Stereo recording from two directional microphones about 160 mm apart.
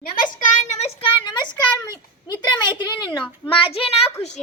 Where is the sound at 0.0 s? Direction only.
65° left (ahead or behind).